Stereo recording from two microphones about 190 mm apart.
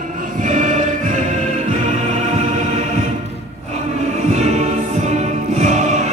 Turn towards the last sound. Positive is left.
turn(degrees=-35)  # may be behind; listen again after turning